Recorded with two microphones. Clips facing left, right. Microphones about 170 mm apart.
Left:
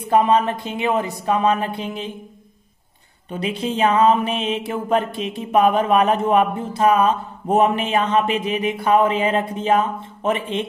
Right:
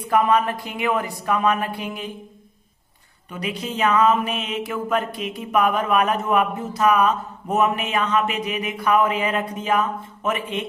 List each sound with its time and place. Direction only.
0.1 s music: 25° left (ahead or behind)
3.3 s music: 25° left (ahead or behind)